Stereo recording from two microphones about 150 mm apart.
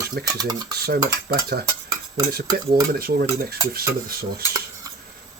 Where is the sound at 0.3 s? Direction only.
25° right (ahead or behind).